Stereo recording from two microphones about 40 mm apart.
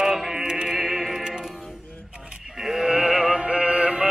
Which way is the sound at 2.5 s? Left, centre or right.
Centre.